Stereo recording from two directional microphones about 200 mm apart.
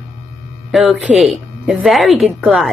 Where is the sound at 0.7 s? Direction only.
Centre (ahead or behind).